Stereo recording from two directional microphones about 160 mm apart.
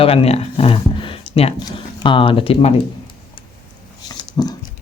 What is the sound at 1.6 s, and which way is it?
Speech, 25° left (ahead or behind).